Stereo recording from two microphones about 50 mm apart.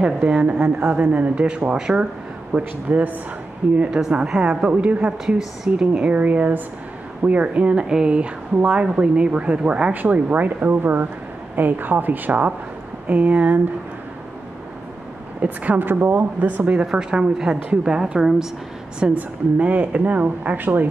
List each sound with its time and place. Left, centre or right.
0.3 s a woman's voice: centre
2.5 s speech: right
4.0 s a woman's voice: centre
9.9 s speech: right
15.4 s speech: right
15.8 s speech: right
16.9 s a woman's voice: centre
19.1 s speech: right